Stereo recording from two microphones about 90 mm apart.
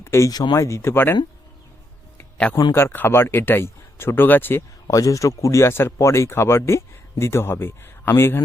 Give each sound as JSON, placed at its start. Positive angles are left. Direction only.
{"t": 0.0, "sound": "a sound", "side_deg": 30}
{"t": 0.3, "sound": "speech", "side_deg": 45}
{"t": 0.6, "sound": "speech", "side_deg": 30}
{"t": 2.7, "sound": "speech", "side_deg": 25}
{"t": 4.9, "sound": "speech", "side_deg": 40}